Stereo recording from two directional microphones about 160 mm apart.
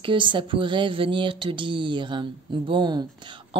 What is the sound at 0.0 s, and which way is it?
Speech, 30° right (ahead or behind).